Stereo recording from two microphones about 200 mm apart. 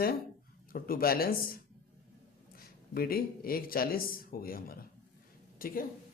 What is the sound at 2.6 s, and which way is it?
Speech, 50° left (ahead or behind).